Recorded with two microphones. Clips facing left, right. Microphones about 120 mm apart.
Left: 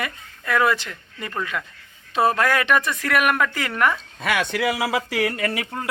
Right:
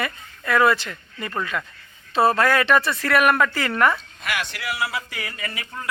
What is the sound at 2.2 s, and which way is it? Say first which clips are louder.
A woman's voice: right 1 dB; 15° left (ahead or behind).